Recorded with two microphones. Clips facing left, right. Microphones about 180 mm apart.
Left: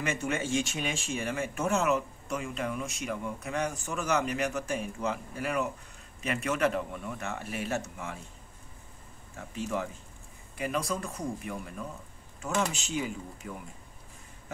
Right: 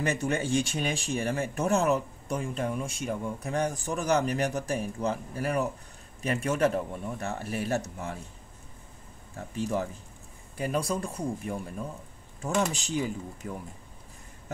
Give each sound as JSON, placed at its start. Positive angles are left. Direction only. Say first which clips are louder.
{"t": 0.0, "sound": "speech", "louder": "right 3 dB", "side_deg": -35}
{"t": 9.4, "sound": "speech", "louder": "right 3 dB", "side_deg": -35}